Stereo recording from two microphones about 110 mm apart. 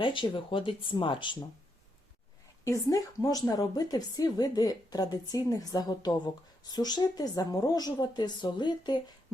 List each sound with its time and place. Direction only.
0.0 s speech: 50° left (ahead or behind)
2.6 s a woman's voice: 30° left (ahead or behind)